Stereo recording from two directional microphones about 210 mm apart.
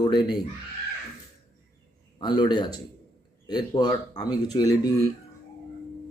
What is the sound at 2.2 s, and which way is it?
Speech, 20° left (ahead or behind).